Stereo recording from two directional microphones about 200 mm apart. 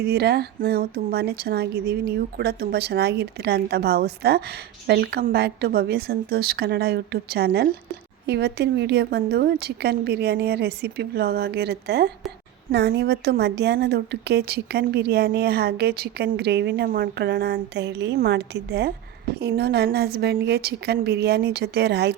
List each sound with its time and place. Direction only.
0.0 s a woman's voice: 55° right (ahead or behind)